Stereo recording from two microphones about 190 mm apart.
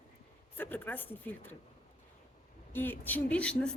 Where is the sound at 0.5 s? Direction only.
10° left (ahead or behind).